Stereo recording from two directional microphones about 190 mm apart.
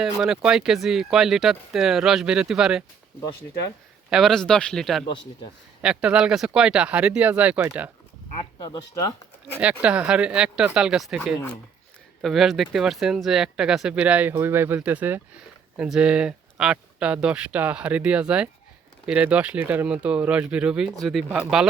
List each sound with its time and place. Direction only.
0.0 s speech: 5° right (ahead or behind)
4.1 s speech: centre (ahead or behind)
8.4 s speech: 20° left (ahead or behind)
9.6 s speech: 5° right (ahead or behind)